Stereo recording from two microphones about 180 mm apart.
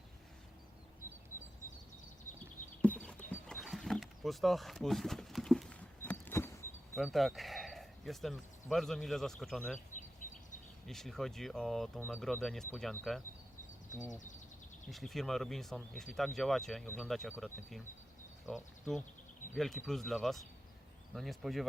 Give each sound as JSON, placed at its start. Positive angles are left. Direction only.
{"t": 2.8, "sound": "wild animals", "side_deg": 5}
{"t": 6.9, "sound": "speech", "side_deg": 0}
{"t": 10.2, "sound": "a sound", "side_deg": 45}
{"t": 10.8, "sound": "speech", "side_deg": 0}
{"t": 14.1, "sound": "speech", "side_deg": 45}
{"t": 14.8, "sound": "speech", "side_deg": 0}